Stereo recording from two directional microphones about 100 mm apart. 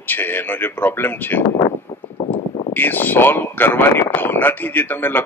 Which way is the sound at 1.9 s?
40° left (ahead or behind).